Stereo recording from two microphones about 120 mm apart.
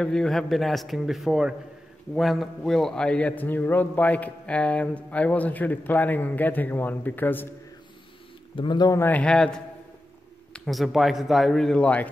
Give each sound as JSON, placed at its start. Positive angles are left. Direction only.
{"t": 0.0, "sound": "a man's voice", "side_deg": 5}
{"t": 8.5, "sound": "speech", "side_deg": 35}
{"t": 9.0, "sound": "a man's voice", "side_deg": 10}